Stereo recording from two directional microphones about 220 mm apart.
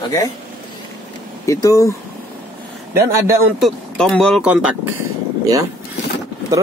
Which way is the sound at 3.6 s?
5° left (ahead or behind).